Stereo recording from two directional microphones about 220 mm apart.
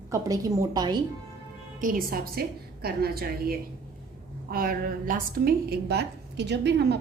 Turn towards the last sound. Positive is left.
turn(degrees=-50)  # may be behind; listen again after turning